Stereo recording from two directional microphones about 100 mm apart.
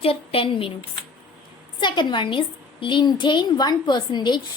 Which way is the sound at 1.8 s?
50° left (ahead or behind).